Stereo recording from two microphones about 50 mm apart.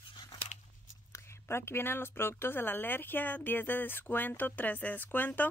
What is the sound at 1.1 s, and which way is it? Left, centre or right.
Speech, left.